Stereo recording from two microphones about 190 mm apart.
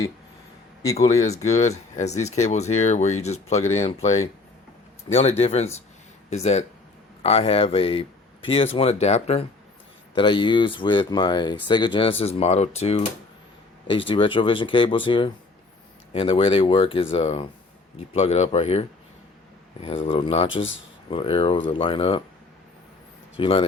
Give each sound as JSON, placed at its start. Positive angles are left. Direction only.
{"t": 1.5, "sound": "speech", "side_deg": 35}
{"t": 23.4, "sound": "speech", "side_deg": 25}